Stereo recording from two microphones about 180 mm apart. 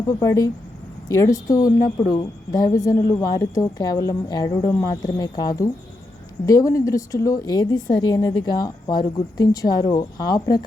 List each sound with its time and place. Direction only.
0.2 s a woman's voice: 20° left (ahead or behind)